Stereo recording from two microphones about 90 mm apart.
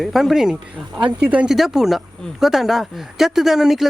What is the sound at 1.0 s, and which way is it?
Speech, 15° right (ahead or behind).